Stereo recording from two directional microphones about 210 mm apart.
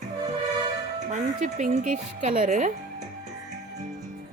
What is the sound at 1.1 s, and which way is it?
Speech, 35° right (ahead or behind).